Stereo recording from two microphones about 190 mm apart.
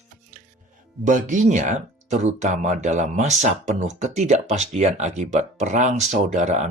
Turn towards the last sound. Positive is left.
turn(degrees=-40)  # may be behind; listen again after turning